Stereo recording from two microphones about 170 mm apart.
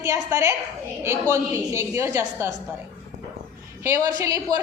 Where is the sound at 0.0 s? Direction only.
15° right (ahead or behind).